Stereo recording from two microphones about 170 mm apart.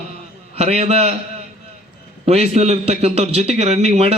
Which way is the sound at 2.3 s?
40° right (ahead or behind).